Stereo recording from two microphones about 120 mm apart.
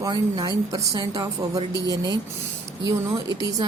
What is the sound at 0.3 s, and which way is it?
Speech, 35° right (ahead or behind).